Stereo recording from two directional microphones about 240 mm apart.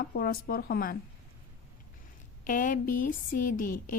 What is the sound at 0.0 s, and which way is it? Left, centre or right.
Speech, left.